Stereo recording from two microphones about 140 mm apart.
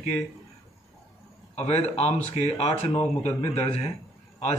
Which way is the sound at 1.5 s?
50° left (ahead or behind).